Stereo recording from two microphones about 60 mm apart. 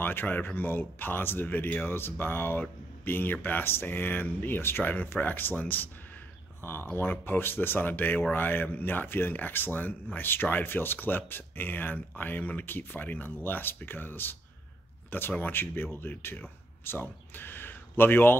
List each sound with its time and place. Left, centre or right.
0.0 s speech: left